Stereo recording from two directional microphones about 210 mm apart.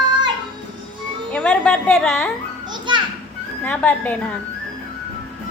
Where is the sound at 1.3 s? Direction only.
5° left (ahead or behind).